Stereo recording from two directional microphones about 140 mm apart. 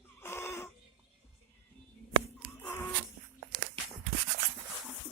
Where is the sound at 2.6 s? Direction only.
20° left (ahead or behind).